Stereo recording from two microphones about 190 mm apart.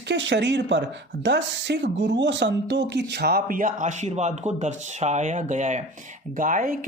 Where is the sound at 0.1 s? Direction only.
70° right (ahead or behind).